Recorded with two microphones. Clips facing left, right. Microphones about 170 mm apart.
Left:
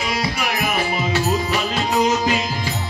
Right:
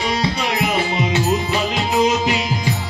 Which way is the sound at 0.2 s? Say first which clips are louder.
Right 3 dB; 25° right (ahead or behind).